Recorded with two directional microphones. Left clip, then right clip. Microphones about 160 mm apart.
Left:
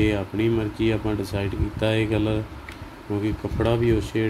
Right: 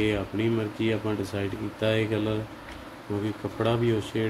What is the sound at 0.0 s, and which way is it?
Speech, 35° left (ahead or behind).